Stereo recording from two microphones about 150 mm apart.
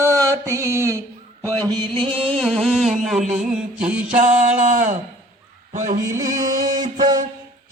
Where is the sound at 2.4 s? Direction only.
Centre (ahead or behind).